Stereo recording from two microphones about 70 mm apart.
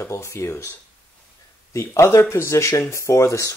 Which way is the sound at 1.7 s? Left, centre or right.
Left.